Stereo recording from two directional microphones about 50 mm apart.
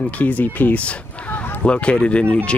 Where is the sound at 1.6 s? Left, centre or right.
Left.